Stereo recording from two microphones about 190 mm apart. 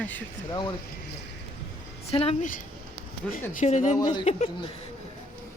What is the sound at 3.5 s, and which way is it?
Speech, 40° left (ahead or behind).